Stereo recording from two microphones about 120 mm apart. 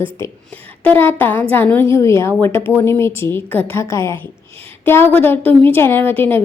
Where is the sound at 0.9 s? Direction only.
15° left (ahead or behind).